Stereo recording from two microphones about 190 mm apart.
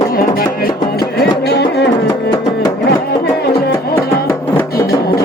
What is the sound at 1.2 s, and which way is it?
Music, 60° left (ahead or behind).